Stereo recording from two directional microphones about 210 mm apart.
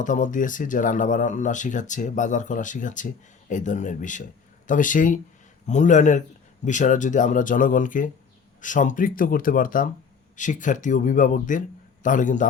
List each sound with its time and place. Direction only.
0.0 s speech: 35° left (ahead or behind)